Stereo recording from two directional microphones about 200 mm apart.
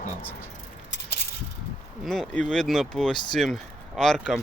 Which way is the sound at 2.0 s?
5° left (ahead or behind).